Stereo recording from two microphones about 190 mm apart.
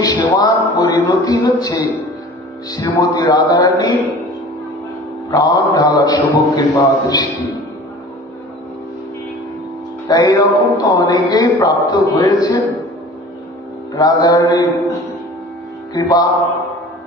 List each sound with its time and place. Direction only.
0.0 s a man's voice: 20° left (ahead or behind)
5.3 s a man's voice: 20° left (ahead or behind)
10.0 s a man's voice: 20° left (ahead or behind)
13.9 s a man's voice: 20° left (ahead or behind)